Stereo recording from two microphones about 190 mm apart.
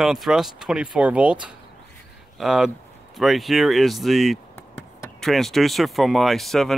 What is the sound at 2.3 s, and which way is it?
Speech, centre (ahead or behind).